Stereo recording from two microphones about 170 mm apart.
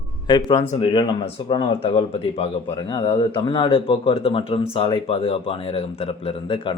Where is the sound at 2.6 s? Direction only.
20° left (ahead or behind).